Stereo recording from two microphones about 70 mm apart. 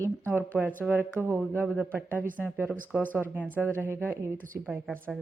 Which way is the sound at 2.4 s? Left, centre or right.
Centre.